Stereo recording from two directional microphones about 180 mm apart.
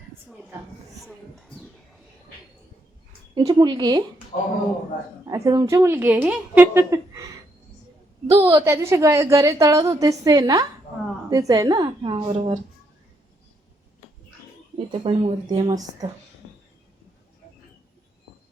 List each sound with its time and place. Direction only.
0.3 s a woman's voice: centre (ahead or behind)
1.0 s a sound: centre (ahead or behind)
3.3 s speech: 20° right (ahead or behind)
5.3 s a woman's voice: 20° right (ahead or behind)
8.3 s a woman's voice: 15° right (ahead or behind)
15.0 s speech: 30° right (ahead or behind)